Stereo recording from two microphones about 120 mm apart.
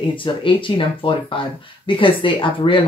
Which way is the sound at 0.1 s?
45° left (ahead or behind).